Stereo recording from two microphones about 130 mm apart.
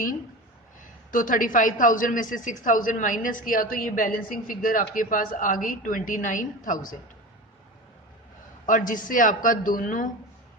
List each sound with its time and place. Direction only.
1.1 s a woman's voice: 90° left
8.6 s a woman's voice: 90° left